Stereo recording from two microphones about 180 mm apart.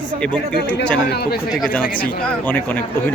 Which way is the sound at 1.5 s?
Centre (ahead or behind).